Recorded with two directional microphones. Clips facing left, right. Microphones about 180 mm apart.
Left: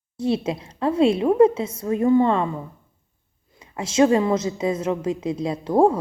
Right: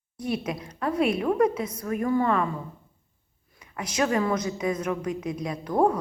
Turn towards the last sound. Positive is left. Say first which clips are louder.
# left 5 dB
turn(degrees=25)  # may be behind; listen again after turning